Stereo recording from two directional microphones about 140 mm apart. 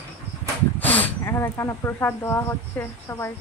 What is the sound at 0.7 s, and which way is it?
Speech, 10° left (ahead or behind).